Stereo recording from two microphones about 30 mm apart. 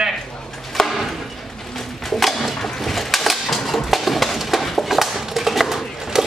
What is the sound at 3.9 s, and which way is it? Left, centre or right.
Music, centre.